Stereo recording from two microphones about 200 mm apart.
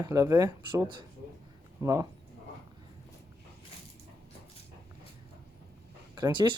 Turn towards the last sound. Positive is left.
turn(degrees=-20)  # may be behind; listen again after turning